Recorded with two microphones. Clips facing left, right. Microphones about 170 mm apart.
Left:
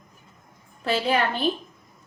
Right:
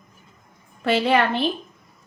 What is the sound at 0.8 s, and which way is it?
Speech, 75° right (ahead or behind).